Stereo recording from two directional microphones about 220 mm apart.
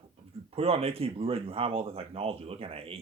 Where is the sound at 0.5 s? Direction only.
25° right (ahead or behind).